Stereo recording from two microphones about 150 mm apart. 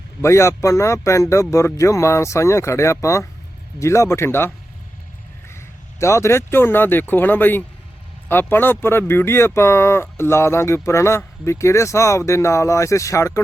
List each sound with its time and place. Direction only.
0.2 s speech: 20° left (ahead or behind)
5.5 s speech: 20° left (ahead or behind)